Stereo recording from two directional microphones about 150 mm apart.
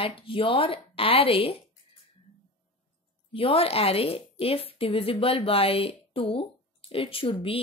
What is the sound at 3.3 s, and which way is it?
A woman's voice, 40° left (ahead or behind).